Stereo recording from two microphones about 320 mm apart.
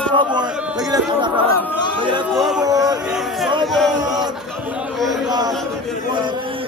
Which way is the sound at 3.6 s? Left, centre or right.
Centre.